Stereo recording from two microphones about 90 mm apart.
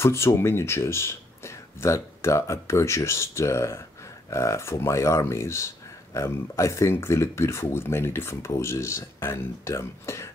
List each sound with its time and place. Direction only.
0.0 s speech: 30° left (ahead or behind)